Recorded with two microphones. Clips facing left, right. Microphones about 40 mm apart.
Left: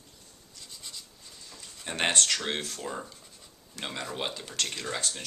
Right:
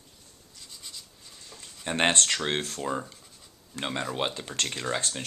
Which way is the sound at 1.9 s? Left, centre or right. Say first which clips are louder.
Right 3 dB; right.